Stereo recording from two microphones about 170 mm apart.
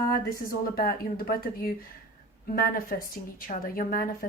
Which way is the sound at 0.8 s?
60° left (ahead or behind).